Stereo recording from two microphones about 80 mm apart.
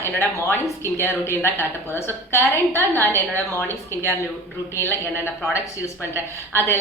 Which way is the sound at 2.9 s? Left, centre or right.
Left.